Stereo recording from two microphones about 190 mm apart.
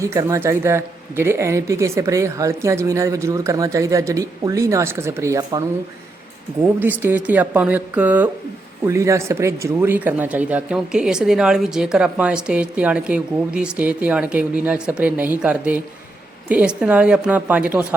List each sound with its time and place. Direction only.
0.0 s speech: 15° right (ahead or behind)
6.7 s speech: 10° right (ahead or behind)